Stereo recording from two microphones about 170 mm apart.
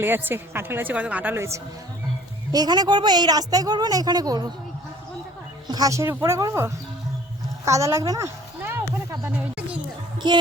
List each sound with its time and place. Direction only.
0.0 s a woman's voice: 10° right (ahead or behind)
5.6 s a woman's voice: 20° right (ahead or behind)
7.6 s a sound: 15° right (ahead or behind)